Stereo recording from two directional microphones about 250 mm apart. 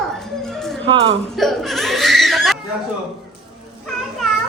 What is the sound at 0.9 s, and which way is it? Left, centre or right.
Speech, right.